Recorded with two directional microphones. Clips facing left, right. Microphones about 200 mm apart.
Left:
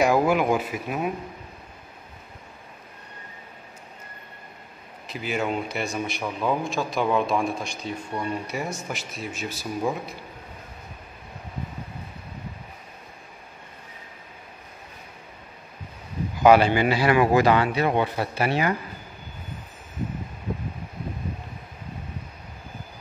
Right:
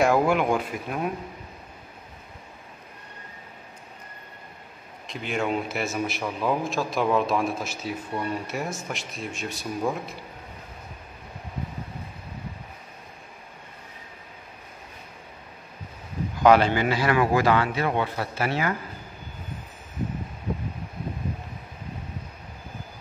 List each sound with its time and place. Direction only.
0.0 s a man's voice: centre (ahead or behind)
5.0 s a man's voice: 5° left (ahead or behind)
16.4 s a man's voice: 10° left (ahead or behind)